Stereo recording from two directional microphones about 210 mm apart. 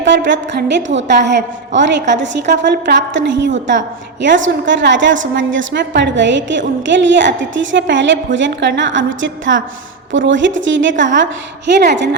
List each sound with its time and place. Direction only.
0.0 s a woman's voice: 60° right (ahead or behind)